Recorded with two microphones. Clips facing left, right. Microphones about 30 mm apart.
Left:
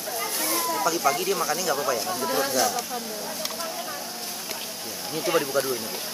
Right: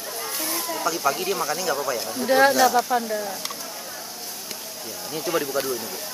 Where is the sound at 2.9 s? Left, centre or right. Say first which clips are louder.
Right 10 dB; right.